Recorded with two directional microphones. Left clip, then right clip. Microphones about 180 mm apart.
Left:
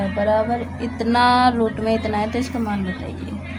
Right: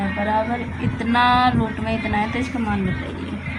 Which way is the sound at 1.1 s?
55° left (ahead or behind).